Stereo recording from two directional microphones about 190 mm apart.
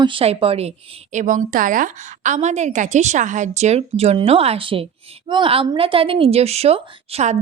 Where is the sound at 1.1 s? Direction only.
40° right (ahead or behind).